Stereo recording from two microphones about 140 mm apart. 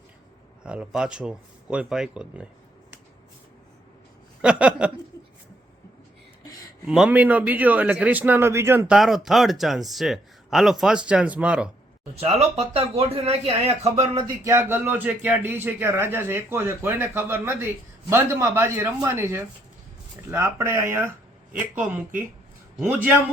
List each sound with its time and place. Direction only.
0.6 s speech: 5° right (ahead or behind)
4.4 s a sound: 10° right (ahead or behind)
6.8 s speech: 5° right (ahead or behind)
8.9 s a man's voice: centre (ahead or behind)
12.1 s speech: 45° right (ahead or behind)
14.2 s speech: 20° right (ahead or behind)